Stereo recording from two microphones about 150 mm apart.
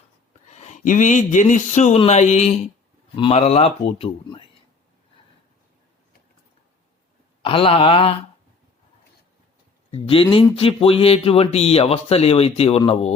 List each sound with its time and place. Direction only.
0.5 s a man's voice: 50° left (ahead or behind)
7.4 s speech: 40° left (ahead or behind)
9.9 s speech: 40° left (ahead or behind)